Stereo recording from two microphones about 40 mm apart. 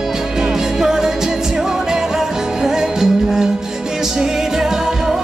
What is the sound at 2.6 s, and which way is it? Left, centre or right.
Music, centre.